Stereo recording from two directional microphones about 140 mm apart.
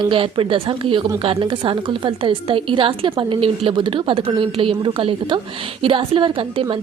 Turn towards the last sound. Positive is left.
turn(degrees=-40)  # may be behind; listen again after turning